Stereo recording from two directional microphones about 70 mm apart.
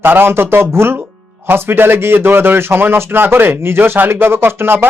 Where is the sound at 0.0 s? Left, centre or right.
Right.